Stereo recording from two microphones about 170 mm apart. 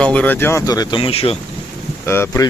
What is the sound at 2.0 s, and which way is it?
Speech, 15° left (ahead or behind).